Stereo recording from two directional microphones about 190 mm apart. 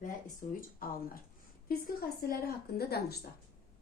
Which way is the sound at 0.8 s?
50° left (ahead or behind).